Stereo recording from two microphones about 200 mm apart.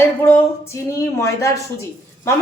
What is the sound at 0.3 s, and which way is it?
A man's voice, 15° left (ahead or behind).